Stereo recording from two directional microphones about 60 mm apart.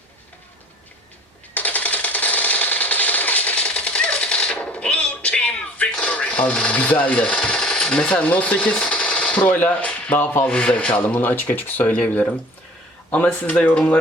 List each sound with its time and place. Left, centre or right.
1.5 s coin: left
6.1 s rub: left
10.4 s speech: centre